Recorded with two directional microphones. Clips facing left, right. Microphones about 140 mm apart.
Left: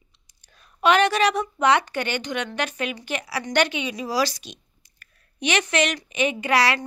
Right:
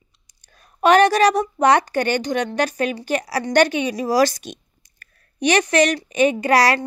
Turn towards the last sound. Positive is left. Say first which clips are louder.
# right 5 dB
turn(degrees=-40)  # may be behind; listen again after turning